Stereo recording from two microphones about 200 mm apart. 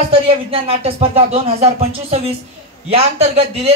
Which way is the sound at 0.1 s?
30° right (ahead or behind).